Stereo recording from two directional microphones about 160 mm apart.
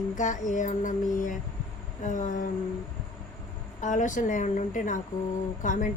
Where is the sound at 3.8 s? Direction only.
50° left (ahead or behind).